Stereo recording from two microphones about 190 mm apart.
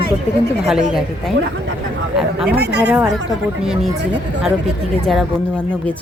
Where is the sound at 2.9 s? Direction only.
5° right (ahead or behind).